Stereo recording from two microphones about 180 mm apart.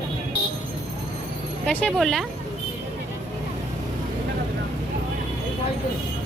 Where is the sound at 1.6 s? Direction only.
5° left (ahead or behind).